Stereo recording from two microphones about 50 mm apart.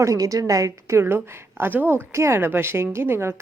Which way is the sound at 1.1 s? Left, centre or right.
Right.